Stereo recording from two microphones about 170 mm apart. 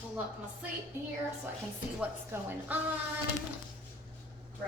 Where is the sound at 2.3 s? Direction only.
15° right (ahead or behind).